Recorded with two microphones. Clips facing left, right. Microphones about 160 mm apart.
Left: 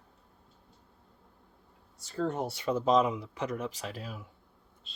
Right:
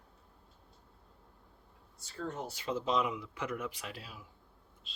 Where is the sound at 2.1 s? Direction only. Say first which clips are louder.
Left 8 dB; 80° left; by 4.2 s 45° left (ahead or behind).